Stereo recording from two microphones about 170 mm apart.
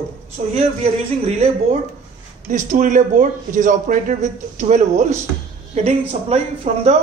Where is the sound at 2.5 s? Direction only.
50° right (ahead or behind).